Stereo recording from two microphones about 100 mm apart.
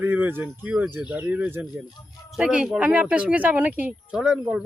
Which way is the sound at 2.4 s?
5° right (ahead or behind).